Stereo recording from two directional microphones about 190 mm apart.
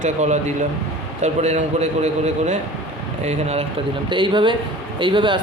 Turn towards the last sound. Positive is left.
turn(degrees=-25)  # may be behind; listen again after turning